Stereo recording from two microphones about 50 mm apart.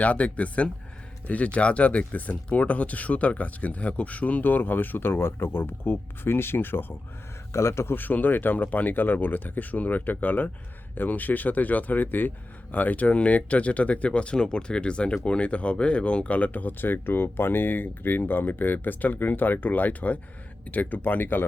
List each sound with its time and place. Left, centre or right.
0.0 s speech: left
7.5 s speech: left
7.9 s speech: left